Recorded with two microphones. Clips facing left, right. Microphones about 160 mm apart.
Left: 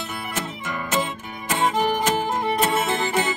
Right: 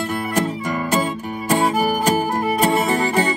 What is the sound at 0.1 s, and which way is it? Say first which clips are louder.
Music: right 9 dB; 40° right (ahead or behind).